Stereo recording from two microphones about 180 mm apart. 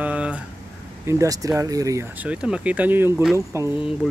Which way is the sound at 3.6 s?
25° left (ahead or behind).